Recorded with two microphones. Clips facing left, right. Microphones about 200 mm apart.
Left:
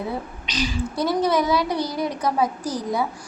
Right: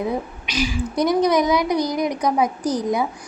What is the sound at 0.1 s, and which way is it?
A woman's voice, 10° right (ahead or behind).